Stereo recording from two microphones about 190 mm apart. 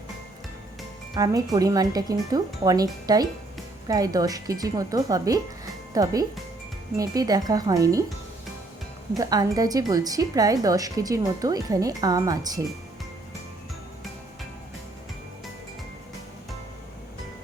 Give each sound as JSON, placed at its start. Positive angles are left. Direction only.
{"t": 1.1, "sound": "speech", "side_deg": -20}
{"t": 9.1, "sound": "speech", "side_deg": -20}